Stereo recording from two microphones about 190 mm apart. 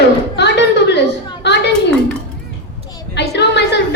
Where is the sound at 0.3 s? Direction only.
65° left (ahead or behind).